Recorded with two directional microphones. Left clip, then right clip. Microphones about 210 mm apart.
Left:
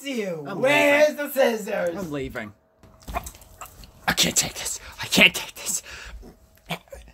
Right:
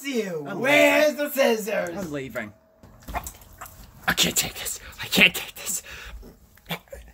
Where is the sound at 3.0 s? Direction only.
15° left (ahead or behind).